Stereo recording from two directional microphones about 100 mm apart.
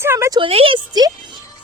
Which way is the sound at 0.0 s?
25° right (ahead or behind).